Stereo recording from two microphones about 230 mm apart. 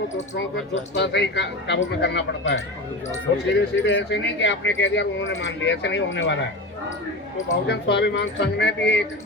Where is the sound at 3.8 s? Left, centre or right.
Left.